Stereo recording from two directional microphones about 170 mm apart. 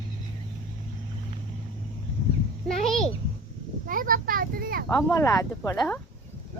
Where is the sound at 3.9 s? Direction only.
55° right (ahead or behind).